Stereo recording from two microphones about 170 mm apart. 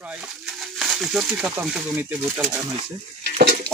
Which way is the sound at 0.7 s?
Centre (ahead or behind).